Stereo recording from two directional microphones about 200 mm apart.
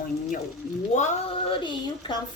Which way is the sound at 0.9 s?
35° left (ahead or behind).